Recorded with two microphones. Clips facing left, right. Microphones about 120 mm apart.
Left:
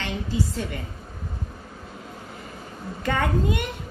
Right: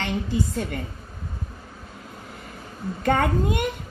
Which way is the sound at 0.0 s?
55° right (ahead or behind).